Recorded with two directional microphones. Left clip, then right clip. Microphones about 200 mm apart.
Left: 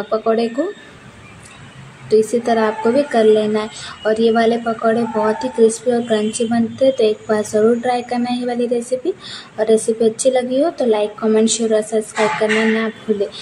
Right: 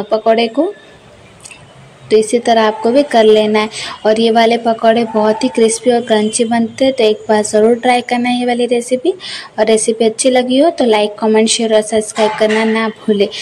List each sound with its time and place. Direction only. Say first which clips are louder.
0.1 s speech: right 6 dB; 20° right (ahead or behind)
2.0 s speech: right 4 dB; 15° right (ahead or behind)